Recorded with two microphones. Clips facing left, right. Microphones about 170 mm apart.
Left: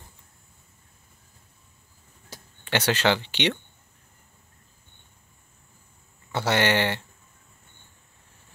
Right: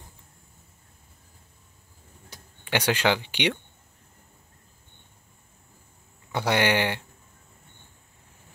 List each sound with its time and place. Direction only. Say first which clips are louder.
2.6 s speech: left 1 dB; 10° right (ahead or behind)
6.3 s speech: even; 15° right (ahead or behind)